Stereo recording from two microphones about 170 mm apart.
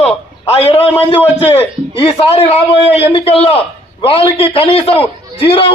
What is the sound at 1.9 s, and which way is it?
A man's voice, 35° left (ahead or behind).